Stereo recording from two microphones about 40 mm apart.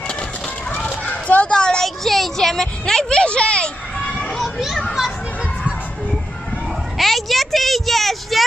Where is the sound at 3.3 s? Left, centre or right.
Left.